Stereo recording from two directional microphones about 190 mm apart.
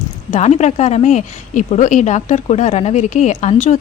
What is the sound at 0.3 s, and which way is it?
Speech, 35° left (ahead or behind).